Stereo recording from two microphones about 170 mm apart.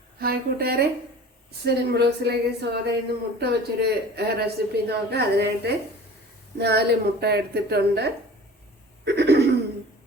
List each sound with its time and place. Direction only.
0.2 s a woman's voice: 65° right (ahead or behind)
9.0 s throat clearing: 75° right (ahead or behind)